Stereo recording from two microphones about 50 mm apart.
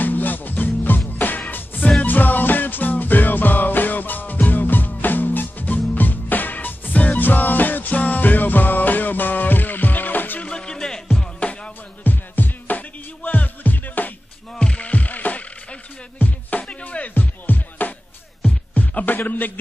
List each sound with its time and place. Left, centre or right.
0.0 s music: left
10.4 s music: centre
12.0 s music: left
14.5 s music: left